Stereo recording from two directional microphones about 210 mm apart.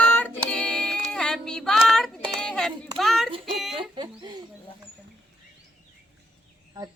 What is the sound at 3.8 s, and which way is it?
Bird, 20° right (ahead or behind).